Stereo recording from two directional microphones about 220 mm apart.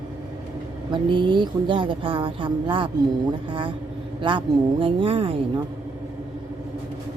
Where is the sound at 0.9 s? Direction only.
20° right (ahead or behind).